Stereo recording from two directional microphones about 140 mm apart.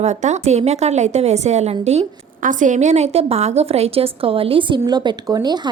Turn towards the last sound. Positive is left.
turn(degrees=-30)  # may be behind; listen again after turning